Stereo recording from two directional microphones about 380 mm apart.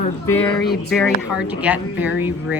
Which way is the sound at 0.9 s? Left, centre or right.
Centre.